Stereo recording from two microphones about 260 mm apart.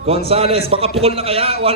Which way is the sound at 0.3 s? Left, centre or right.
Right.